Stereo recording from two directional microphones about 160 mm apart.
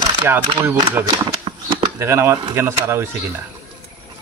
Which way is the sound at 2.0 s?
15° right (ahead or behind).